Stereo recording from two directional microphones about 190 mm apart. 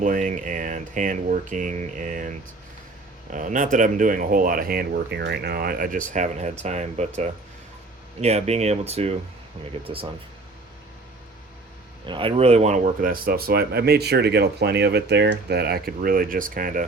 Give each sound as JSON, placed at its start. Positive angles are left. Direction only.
{"t": 0.0, "sound": "speech", "side_deg": -45}
{"t": 8.2, "sound": "speech", "side_deg": -35}
{"t": 12.0, "sound": "speech", "side_deg": -25}